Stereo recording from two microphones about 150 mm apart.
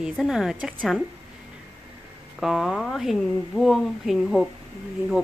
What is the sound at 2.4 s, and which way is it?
Speech, centre (ahead or behind).